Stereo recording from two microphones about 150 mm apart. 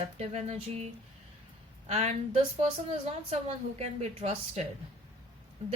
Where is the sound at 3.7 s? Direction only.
45° right (ahead or behind).